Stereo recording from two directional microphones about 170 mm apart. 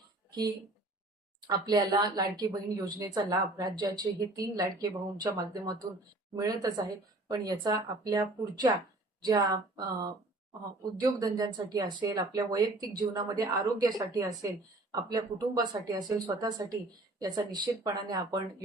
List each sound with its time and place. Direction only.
0.3 s a woman's voice: 25° right (ahead or behind)